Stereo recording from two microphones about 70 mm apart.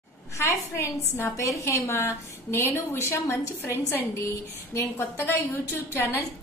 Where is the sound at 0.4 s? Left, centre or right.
Left.